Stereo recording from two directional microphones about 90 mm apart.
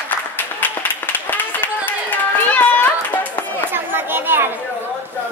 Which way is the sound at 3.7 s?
25° right (ahead or behind).